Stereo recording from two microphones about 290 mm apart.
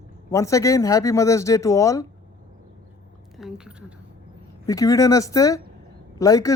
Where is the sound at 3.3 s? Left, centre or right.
Centre.